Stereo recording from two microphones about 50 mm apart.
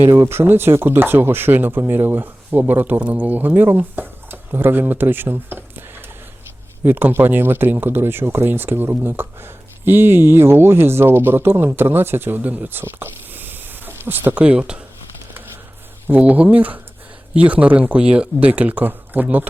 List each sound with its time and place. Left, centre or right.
0.2 s speech: right
14.3 s speech: right
16.2 s speech: right